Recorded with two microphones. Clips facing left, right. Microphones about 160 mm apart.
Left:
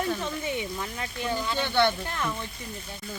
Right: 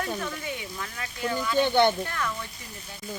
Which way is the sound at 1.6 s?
20° right (ahead or behind).